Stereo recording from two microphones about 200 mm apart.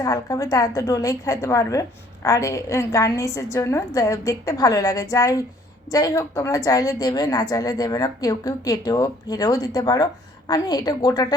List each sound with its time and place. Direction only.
0.0 s a woman's voice: 15° left (ahead or behind)